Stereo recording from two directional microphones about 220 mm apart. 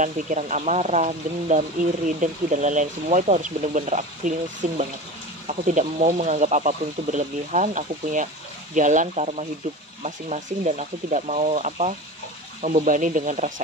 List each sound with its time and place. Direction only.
0.0 s speech: 35° right (ahead or behind)